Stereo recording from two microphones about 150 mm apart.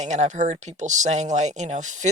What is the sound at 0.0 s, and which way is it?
Speech, 50° right (ahead or behind).